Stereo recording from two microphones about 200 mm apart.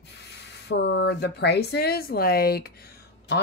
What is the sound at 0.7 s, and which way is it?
Speech, 60° left (ahead or behind).